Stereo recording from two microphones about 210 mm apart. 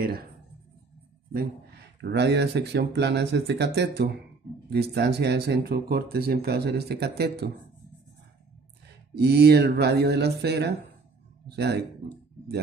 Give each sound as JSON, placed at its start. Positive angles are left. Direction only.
{"t": 1.3, "sound": "speech", "side_deg": -50}
{"t": 9.1, "sound": "speech", "side_deg": -50}